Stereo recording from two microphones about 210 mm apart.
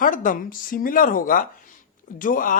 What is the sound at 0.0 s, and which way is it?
Speech, 40° left (ahead or behind).